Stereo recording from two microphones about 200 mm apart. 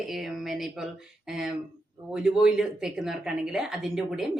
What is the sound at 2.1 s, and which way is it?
Speech, 5° right (ahead or behind).